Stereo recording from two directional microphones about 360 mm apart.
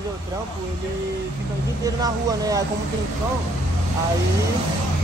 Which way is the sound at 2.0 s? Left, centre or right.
Centre.